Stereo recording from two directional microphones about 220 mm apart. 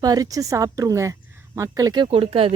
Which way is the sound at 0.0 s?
15° right (ahead or behind).